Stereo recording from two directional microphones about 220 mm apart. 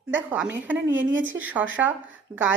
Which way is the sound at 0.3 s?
5° right (ahead or behind).